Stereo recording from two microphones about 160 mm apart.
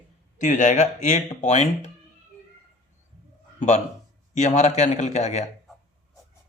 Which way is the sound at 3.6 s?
45° left (ahead or behind).